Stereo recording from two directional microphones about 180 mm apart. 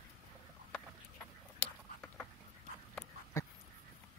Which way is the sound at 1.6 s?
5° left (ahead or behind).